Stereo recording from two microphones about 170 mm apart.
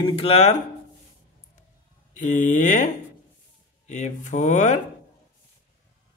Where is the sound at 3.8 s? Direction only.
45° left (ahead or behind).